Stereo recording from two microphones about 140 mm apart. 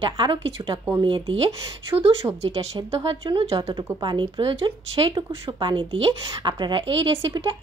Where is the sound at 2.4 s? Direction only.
45° right (ahead or behind).